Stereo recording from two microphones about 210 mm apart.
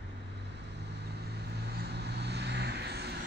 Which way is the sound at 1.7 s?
50° right (ahead or behind).